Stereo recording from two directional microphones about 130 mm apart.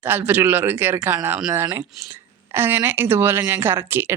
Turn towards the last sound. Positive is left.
turn(degrees=-15)  # may be behind; listen again after turning